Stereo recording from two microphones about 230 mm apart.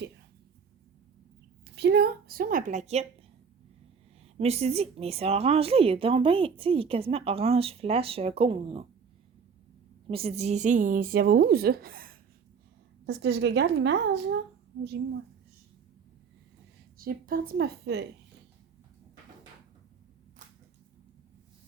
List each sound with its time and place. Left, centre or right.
1.7 s a woman's voice: right
4.4 s speech: right
10.1 s a woman's voice: right
17.0 s a woman's voice: right